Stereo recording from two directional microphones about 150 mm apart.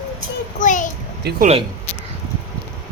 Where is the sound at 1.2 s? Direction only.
90° right.